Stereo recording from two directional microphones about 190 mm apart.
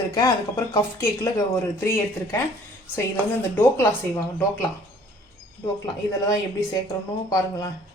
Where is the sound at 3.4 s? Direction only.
10° left (ahead or behind).